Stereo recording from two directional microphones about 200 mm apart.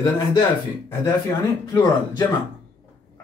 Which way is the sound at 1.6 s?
20° left (ahead or behind).